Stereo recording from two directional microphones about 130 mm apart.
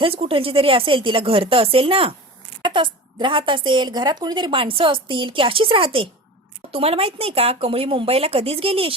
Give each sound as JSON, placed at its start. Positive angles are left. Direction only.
{"t": 0.0, "sound": "a woman's voice", "side_deg": -45}